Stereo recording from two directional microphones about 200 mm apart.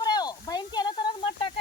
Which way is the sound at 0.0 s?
20° left (ahead or behind).